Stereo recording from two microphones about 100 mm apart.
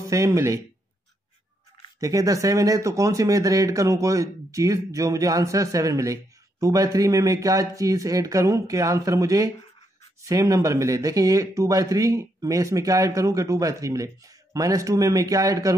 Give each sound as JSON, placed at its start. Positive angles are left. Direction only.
{"t": 0.1, "sound": "speech", "side_deg": -30}
{"t": 2.0, "sound": "speech", "side_deg": -35}